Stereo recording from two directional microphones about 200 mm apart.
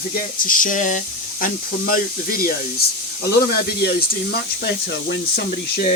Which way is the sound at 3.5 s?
50° left (ahead or behind).